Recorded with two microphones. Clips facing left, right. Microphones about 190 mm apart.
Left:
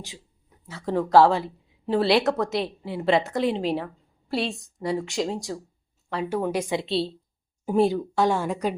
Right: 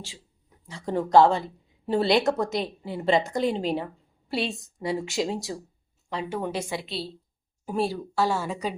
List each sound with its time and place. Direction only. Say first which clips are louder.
0.7 s a woman's voice: left 1 dB; 5° left (ahead or behind)
6.1 s speech: left 4 dB; 5° left (ahead or behind)
6.8 s a woman's voice: left 8 dB; 30° left (ahead or behind)
7.6 s speech: left 6 dB; 20° left (ahead or behind)